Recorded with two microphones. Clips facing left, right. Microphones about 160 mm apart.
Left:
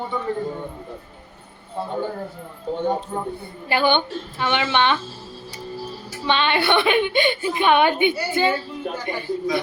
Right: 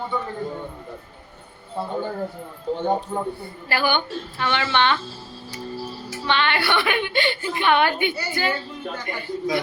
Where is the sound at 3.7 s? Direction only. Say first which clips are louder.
Left 3 dB; 20° left (ahead or behind).